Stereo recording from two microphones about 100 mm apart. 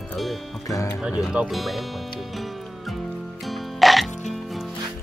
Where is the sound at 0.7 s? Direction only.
30° left (ahead or behind).